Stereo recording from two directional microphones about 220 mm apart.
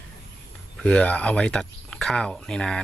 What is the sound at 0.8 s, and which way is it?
Speech, 5° left (ahead or behind).